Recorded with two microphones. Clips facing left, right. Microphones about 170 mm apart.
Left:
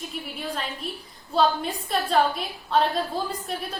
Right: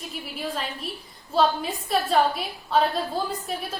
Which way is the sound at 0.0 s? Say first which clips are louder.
Right 1 dB; centre (ahead or behind).